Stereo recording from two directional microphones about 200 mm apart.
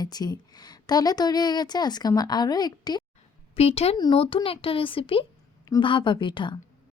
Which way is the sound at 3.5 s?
30° left (ahead or behind).